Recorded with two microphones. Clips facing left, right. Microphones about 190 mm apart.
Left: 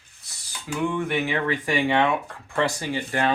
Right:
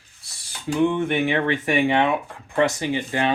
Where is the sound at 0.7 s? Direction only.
25° right (ahead or behind).